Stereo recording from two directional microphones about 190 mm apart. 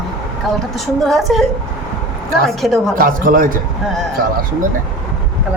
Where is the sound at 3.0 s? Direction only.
45° right (ahead or behind).